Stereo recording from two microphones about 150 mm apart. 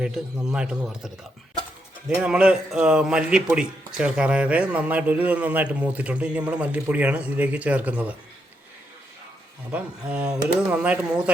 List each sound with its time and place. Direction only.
0.0 s a man's voice: 5° right (ahead or behind)
9.7 s a man's voice: 10° right (ahead or behind)